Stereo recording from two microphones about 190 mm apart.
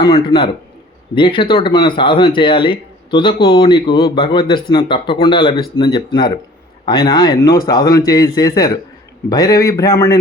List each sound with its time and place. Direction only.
0.0 s a man's voice: 25° left (ahead or behind)